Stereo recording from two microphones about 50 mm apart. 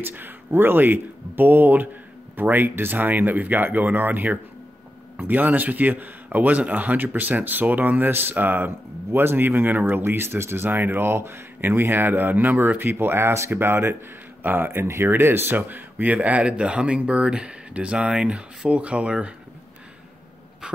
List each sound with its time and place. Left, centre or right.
0.0 s a man's voice: right
13.0 s speech: right
14.4 s speech: right
16.4 s speech: right